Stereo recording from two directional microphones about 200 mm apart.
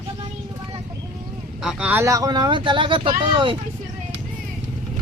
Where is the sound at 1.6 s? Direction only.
10° right (ahead or behind); by 3.6 s 25° right (ahead or behind).